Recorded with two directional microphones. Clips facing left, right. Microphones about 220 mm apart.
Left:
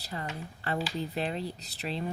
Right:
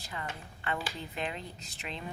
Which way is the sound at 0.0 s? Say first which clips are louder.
Left 4 dB; 35° left (ahead or behind).